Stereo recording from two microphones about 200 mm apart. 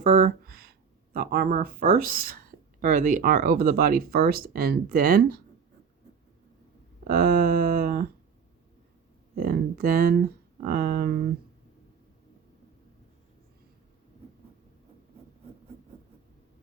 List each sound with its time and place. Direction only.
0.0 s speech: 35° right (ahead or behind)
7.1 s speech: 50° right (ahead or behind)
9.3 s speech: 50° right (ahead or behind)